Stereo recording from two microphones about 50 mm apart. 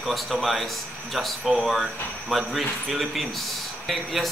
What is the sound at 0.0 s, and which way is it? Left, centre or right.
A man's voice, centre.